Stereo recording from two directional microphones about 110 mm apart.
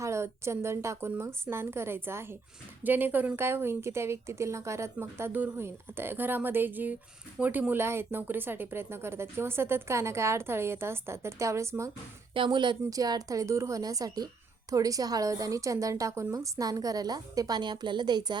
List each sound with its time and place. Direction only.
0.0 s speech: 25° right (ahead or behind)
12.3 s a woman's voice: 50° right (ahead or behind)